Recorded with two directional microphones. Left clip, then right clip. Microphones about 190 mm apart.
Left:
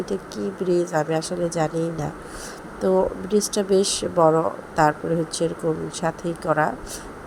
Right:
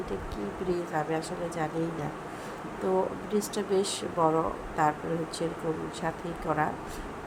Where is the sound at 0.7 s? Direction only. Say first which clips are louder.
Left 9 dB; 30° left (ahead or behind).